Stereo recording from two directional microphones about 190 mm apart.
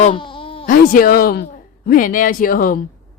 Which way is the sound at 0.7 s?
45° left (ahead or behind).